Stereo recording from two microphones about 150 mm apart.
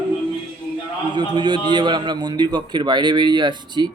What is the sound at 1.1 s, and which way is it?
A man's voice, 30° right (ahead or behind).